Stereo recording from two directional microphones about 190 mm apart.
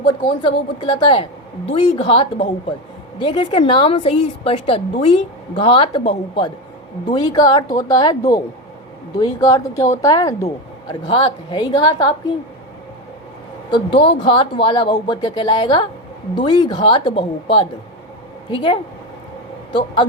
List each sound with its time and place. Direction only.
0.1 s a woman's voice: 25° left (ahead or behind)
13.7 s a woman's voice: 25° left (ahead or behind)